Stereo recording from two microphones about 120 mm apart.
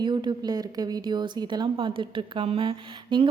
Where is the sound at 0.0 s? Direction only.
40° right (ahead or behind).